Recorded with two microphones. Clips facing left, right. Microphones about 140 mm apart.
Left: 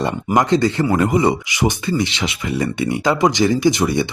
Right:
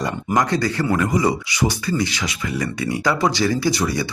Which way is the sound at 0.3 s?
20° left (ahead or behind).